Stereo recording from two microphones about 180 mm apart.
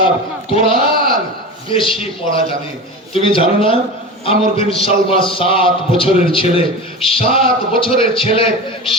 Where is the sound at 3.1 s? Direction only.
30° left (ahead or behind).